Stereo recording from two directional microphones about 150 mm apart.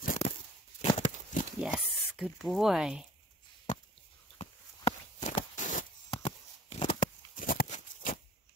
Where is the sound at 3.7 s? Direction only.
55° left (ahead or behind).